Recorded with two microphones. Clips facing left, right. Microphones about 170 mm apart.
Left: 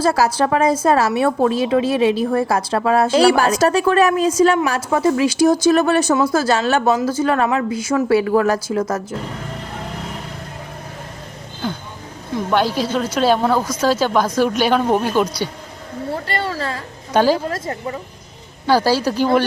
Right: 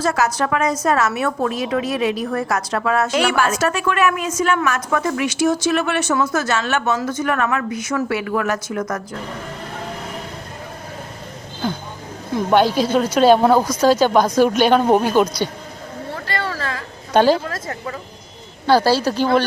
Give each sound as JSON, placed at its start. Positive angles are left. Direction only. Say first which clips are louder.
{"t": 0.0, "sound": "a woman's voice", "louder": "left 3 dB", "side_deg": 30}
{"t": 12.5, "sound": "speech", "louder": "right 3 dB", "side_deg": 0}
{"t": 16.5, "sound": "a sound", "louder": "left 2 dB", "side_deg": 30}
{"t": 17.2, "sound": "speech", "louder": "right 1 dB", "side_deg": 10}
{"t": 18.6, "sound": "speech", "louder": "right 1 dB", "side_deg": 10}